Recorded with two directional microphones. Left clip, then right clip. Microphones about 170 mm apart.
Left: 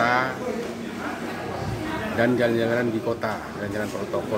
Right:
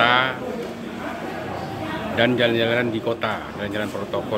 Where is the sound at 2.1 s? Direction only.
Centre (ahead or behind).